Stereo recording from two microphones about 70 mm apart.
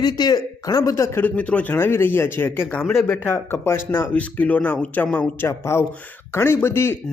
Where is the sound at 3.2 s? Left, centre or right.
Left.